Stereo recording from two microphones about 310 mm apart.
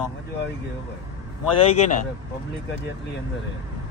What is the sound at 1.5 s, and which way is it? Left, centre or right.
Speech, left.